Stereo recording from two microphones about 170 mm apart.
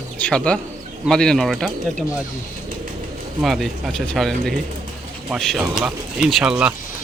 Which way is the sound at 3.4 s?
Centre (ahead or behind).